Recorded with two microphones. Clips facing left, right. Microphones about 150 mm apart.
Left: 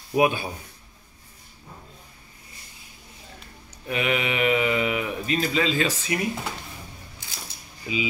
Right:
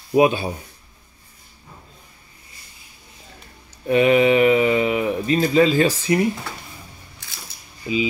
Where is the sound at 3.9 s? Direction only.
30° right (ahead or behind).